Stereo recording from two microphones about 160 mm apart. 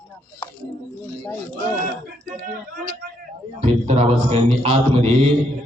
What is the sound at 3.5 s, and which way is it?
Speech, 40° right (ahead or behind).